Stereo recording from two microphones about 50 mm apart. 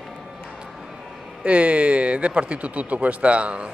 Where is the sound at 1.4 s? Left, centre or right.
Right.